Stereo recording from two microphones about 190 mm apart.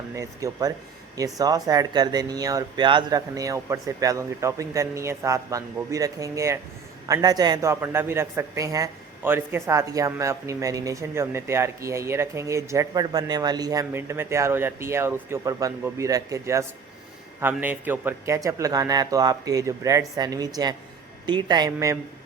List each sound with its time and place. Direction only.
0.1 s a man's voice: 15° right (ahead or behind)